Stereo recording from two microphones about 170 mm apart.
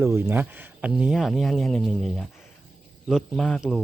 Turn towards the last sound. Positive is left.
turn(degrees=0)  # may be behind; listen again after turning